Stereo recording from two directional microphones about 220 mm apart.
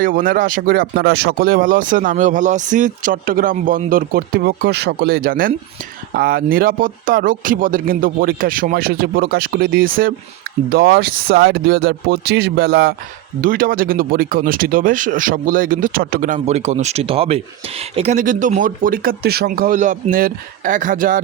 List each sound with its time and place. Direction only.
0.0 s speech: 40° right (ahead or behind)